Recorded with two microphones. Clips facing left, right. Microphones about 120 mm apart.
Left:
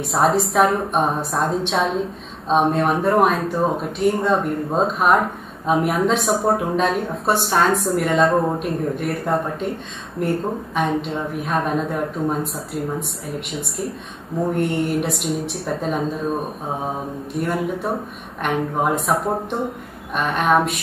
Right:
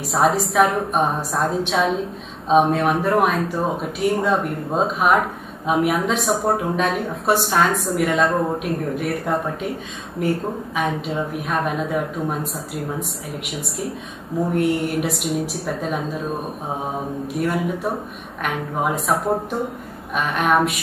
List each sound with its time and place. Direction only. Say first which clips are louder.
0.0 s a woman's voice: left 1 dB; centre (ahead or behind)
10.2 s a woman's voice: even; centre (ahead or behind)
17.3 s a woman's voice: even; 5° right (ahead or behind)